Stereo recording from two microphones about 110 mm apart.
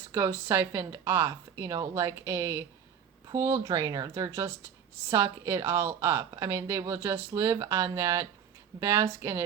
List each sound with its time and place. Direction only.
0.1 s a woman's voice: 25° right (ahead or behind)